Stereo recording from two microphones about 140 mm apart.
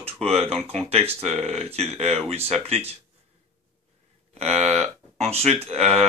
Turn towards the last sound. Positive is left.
turn(degrees=-50)  # may be behind; listen again after turning